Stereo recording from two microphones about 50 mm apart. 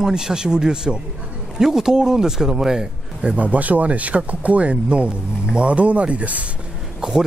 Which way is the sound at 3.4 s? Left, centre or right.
Right.